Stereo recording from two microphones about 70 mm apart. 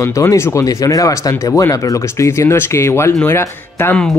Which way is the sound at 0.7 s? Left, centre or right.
Left.